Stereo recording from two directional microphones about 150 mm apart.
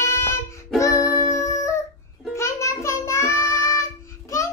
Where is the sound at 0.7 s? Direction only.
20° left (ahead or behind).